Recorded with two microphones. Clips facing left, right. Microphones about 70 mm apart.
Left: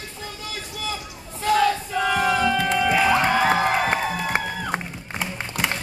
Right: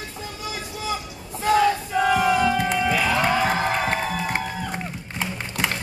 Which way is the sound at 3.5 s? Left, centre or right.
Centre.